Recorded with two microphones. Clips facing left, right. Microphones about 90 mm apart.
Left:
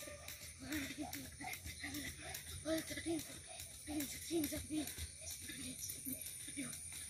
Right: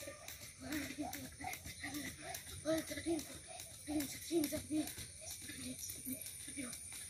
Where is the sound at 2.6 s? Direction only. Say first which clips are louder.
Right 3 dB; 15° right (ahead or behind).